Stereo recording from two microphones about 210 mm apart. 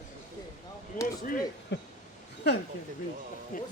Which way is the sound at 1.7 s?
55° left (ahead or behind).